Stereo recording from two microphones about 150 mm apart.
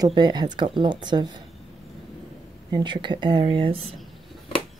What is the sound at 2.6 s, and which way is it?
Speech, 30° right (ahead or behind).